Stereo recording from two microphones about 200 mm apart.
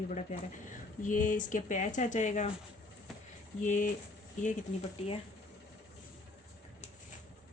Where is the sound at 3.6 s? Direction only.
40° left (ahead or behind).